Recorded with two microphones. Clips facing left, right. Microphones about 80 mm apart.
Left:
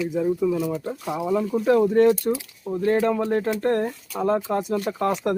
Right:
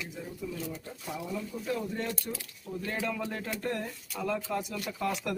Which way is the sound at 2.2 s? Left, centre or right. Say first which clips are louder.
Left 14 dB; left.